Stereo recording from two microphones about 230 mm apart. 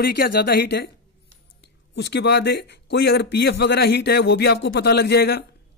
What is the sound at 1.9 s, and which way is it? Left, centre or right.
A man's voice, left.